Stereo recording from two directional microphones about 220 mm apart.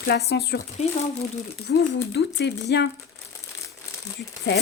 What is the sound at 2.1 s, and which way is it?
Speech, 50° left (ahead or behind).